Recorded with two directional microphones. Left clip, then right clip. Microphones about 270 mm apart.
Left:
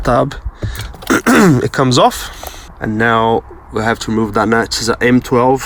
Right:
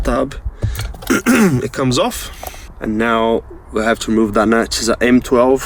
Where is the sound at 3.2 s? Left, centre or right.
Right.